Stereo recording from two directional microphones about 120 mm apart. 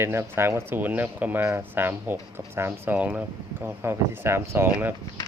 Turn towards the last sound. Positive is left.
turn(degrees=-15)  # may be behind; listen again after turning